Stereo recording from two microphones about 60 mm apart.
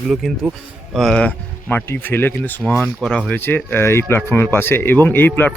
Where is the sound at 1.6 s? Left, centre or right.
Left.